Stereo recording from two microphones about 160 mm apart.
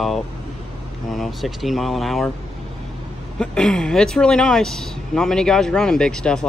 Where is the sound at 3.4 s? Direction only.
5° left (ahead or behind).